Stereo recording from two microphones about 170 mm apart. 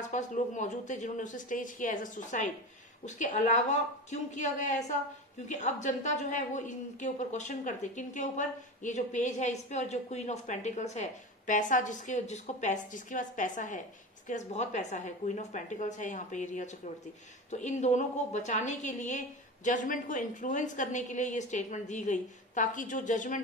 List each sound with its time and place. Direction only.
0.0 s a woman's voice: 45° left (ahead or behind)